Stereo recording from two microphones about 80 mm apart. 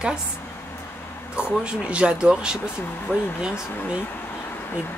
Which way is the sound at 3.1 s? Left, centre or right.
Left.